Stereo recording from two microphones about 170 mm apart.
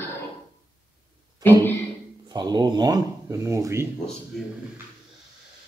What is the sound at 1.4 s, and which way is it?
Speech, 20° right (ahead or behind).